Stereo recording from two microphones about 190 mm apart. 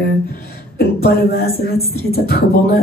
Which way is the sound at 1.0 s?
55° left (ahead or behind).